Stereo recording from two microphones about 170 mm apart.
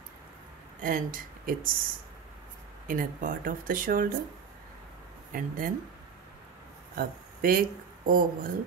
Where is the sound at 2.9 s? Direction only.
55° right (ahead or behind).